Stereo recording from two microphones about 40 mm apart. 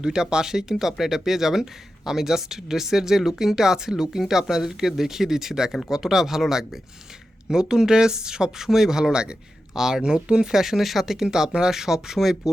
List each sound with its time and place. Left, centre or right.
0.0 s speech: centre